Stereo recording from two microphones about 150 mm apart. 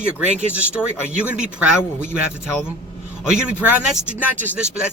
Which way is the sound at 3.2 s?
5° right (ahead or behind).